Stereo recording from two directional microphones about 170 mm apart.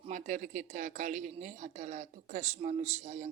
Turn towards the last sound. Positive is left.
turn(degrees=-40)  # may be behind; listen again after turning